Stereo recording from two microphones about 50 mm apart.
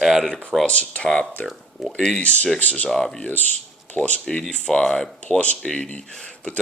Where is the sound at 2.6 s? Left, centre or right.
Left.